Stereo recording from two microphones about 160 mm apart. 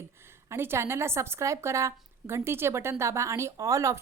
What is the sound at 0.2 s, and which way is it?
Speech, 15° right (ahead or behind).